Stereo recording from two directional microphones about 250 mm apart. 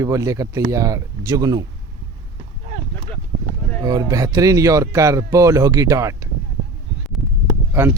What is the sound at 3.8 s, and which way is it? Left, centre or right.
Speech, centre.